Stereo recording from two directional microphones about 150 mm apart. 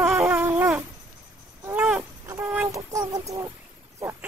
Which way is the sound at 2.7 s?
25° right (ahead or behind).